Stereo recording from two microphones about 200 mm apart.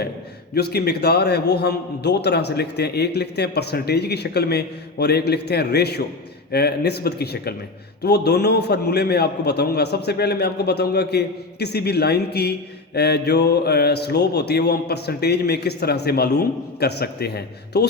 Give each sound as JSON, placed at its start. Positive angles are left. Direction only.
{"t": 0.5, "sound": "a man's voice", "side_deg": 50}